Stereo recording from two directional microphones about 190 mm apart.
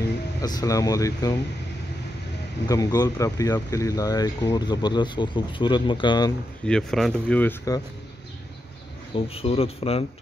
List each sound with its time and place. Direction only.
0.4 s speech: 20° left (ahead or behind)
2.7 s speech: 20° left (ahead or behind)
6.6 s speech: 5° left (ahead or behind)
9.1 s speech: 30° left (ahead or behind)